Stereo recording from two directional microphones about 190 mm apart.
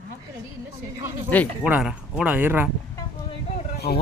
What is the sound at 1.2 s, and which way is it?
Speech, 10° left (ahead or behind).